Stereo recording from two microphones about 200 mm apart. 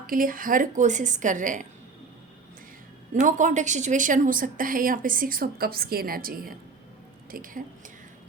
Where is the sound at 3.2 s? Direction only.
40° right (ahead or behind).